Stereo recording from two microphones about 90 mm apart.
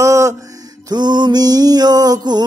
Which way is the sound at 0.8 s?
55° right (ahead or behind).